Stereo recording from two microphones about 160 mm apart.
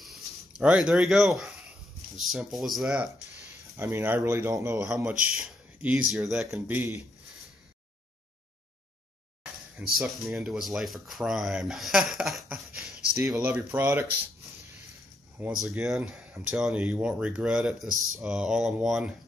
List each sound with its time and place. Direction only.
0.0 s a sound: 5° right (ahead or behind)
2.1 s speech: centre (ahead or behind)
3.7 s speech: 15° right (ahead or behind)
4.8 s speech: centre (ahead or behind)
6.7 s speech: 15° right (ahead or behind)
9.9 s speech: centre (ahead or behind)
13.4 s speech: 15° right (ahead or behind)
15.3 s speech: 5° right (ahead or behind)